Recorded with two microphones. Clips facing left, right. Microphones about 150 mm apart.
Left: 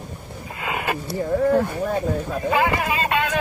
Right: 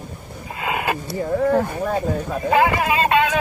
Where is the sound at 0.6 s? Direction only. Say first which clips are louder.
Right 2 dB; 55° right (ahead or behind).